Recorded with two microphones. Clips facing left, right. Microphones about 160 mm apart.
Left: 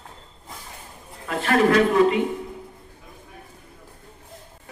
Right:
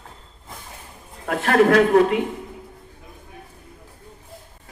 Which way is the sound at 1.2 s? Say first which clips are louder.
Right 3 dB; 65° right (ahead or behind).